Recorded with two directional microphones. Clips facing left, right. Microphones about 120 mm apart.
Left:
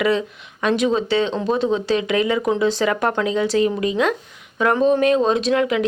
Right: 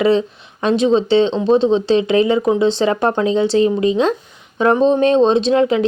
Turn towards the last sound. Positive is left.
turn(degrees=-30)  # may be behind; listen again after turning